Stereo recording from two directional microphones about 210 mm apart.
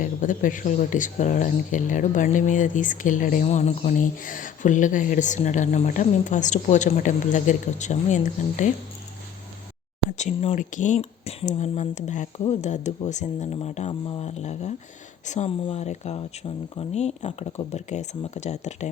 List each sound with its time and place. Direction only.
0.0 s speech: 40° left (ahead or behind)
10.2 s speech: 30° left (ahead or behind)